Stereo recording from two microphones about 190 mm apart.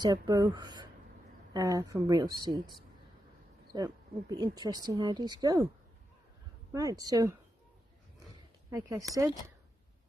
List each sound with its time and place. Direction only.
0.0 s speech: 20° right (ahead or behind)
3.7 s speech: 20° right (ahead or behind)
6.7 s speech: 20° right (ahead or behind)
8.6 s a woman's voice: 15° right (ahead or behind)